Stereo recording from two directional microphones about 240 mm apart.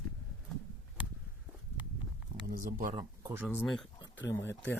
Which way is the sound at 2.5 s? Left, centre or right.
Right.